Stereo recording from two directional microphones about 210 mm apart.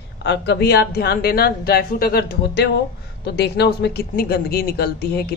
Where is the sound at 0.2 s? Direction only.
55° left (ahead or behind).